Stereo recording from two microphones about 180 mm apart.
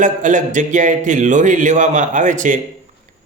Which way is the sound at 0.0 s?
45° right (ahead or behind).